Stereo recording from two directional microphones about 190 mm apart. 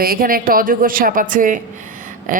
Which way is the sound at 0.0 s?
50° right (ahead or behind).